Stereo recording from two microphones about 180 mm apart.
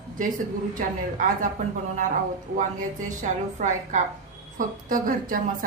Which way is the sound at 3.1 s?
45° right (ahead or behind).